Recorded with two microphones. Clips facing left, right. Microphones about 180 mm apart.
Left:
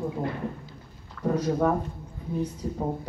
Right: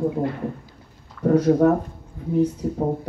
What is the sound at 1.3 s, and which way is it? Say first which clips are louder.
Speech: right 8 dB; 60° right (ahead or behind).